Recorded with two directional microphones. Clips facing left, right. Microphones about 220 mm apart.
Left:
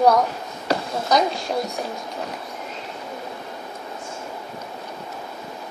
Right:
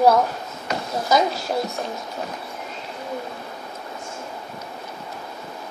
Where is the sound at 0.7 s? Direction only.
35° left (ahead or behind).